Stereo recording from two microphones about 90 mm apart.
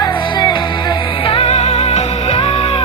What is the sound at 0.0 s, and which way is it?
Music, 60° left (ahead or behind).